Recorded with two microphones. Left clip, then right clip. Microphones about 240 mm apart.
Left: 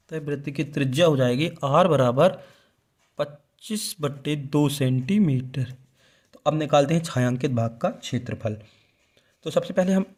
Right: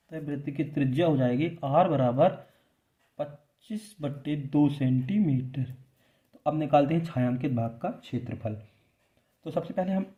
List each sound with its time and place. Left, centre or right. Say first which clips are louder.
0.1 s a man's voice: left 6 dB; left